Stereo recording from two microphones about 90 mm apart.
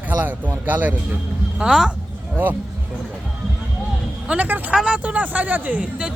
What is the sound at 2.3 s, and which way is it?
Speech, 20° right (ahead or behind).